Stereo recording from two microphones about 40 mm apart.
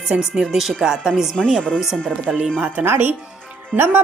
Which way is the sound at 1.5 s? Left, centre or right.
Left.